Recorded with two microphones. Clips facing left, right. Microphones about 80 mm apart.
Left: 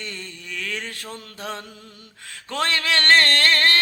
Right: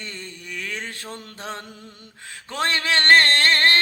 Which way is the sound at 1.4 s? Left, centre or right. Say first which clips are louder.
Left 2 dB; right.